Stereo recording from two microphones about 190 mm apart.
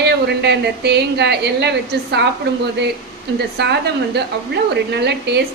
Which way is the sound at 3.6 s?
60° right (ahead or behind).